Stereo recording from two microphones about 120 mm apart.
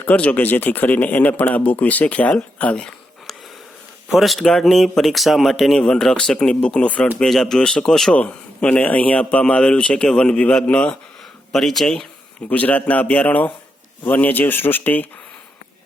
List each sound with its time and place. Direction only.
0.0 s a man's voice: 10° left (ahead or behind)